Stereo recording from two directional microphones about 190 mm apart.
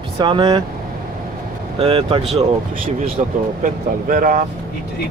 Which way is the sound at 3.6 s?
45° right (ahead or behind).